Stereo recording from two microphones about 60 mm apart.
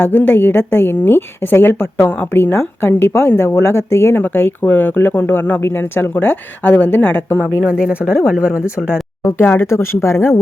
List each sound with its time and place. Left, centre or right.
0.0 s speech: left
4.2 s speech: left
7.7 s speech: centre
9.4 s speech: left
9.6 s speech: left